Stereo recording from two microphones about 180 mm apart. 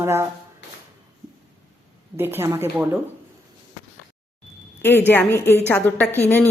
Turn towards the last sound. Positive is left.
turn(degrees=10)  # may be behind; listen again after turning